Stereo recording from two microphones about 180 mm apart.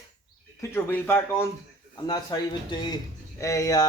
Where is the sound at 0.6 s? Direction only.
10° left (ahead or behind).